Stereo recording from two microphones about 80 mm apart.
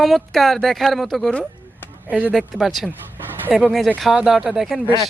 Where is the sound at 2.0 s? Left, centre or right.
Centre.